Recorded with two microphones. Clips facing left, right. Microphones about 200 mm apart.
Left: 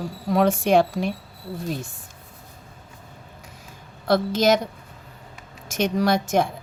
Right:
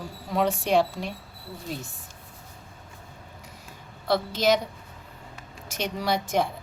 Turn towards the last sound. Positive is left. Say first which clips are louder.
# left 5 dB
turn(degrees=45)  # may be behind; listen again after turning